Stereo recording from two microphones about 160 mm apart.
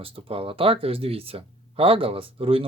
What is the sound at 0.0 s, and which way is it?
Speech, 35° right (ahead or behind).